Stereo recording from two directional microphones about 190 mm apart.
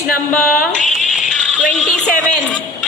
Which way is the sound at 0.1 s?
50° left (ahead or behind).